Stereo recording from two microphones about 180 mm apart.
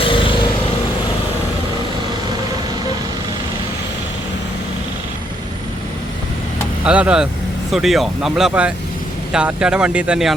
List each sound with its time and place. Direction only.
0.0 s vehicle: 30° left (ahead or behind)
6.8 s speech: 5° right (ahead or behind)